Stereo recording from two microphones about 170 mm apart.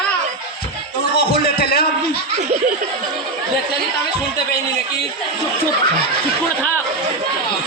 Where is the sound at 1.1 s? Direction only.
70° left (ahead or behind).